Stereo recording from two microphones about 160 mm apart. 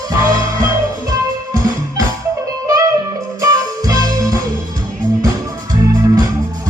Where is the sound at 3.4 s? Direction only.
20° right (ahead or behind).